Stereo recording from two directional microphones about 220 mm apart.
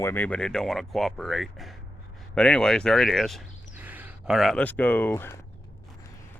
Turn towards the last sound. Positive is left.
turn(degrees=10)  # may be behind; listen again after turning